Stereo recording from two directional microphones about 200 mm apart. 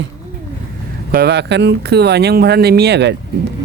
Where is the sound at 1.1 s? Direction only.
55° right (ahead or behind).